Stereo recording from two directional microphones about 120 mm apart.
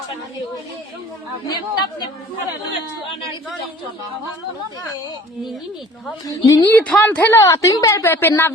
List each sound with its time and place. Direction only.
1.5 s speech: 35° left (ahead or behind)
6.2 s speech: 30° left (ahead or behind)
6.7 s speech: 10° left (ahead or behind)